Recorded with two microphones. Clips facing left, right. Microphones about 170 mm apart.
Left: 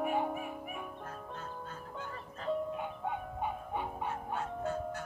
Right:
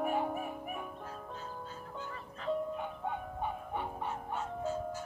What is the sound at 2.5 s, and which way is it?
Music, centre (ahead or behind).